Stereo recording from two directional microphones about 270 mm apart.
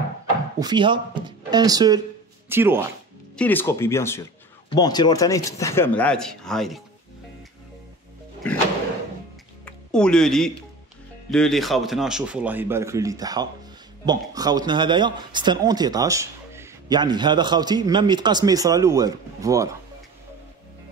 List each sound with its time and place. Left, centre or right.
0.6 s speech: centre
3.3 s speech: centre
9.7 s music: centre
11.2 s a man's voice: centre